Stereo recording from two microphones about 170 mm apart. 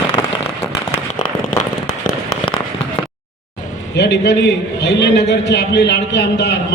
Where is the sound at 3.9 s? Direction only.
85° left.